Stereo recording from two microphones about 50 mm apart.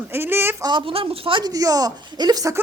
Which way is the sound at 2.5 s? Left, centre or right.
Right.